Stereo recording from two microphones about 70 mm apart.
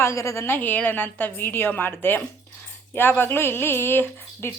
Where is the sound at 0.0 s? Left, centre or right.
Left.